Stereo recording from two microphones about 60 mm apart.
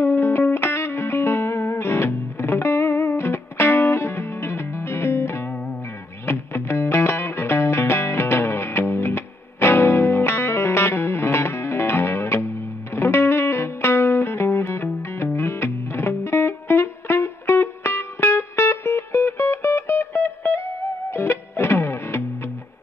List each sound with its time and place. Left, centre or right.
0.0 s music: left
3.6 s music: left
3.9 s music: left